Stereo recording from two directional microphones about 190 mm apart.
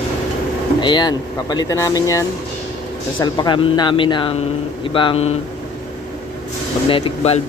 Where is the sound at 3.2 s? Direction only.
25° left (ahead or behind).